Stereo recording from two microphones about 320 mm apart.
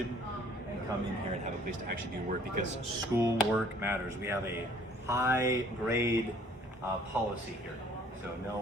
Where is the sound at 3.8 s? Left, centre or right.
Centre.